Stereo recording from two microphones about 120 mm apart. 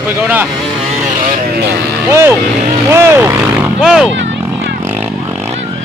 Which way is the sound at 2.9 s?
20° right (ahead or behind).